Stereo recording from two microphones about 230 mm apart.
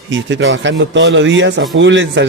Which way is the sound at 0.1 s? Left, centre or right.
Right.